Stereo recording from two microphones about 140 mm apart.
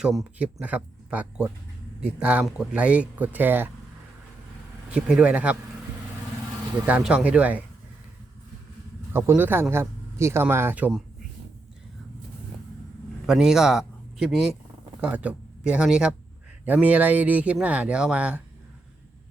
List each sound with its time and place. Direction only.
0.0 s speech: 5° right (ahead or behind)
4.9 s speech: 5° right (ahead or behind)
6.8 s speech: 10° right (ahead or behind)
9.1 s speech: 15° right (ahead or behind)
13.2 s speech: 5° right (ahead or behind)